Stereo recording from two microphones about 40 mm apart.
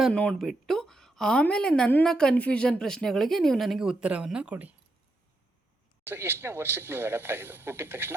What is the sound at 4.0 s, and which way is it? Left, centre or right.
Speech, right.